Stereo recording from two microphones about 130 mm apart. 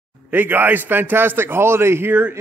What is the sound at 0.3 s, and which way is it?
A man's voice, 15° right (ahead or behind).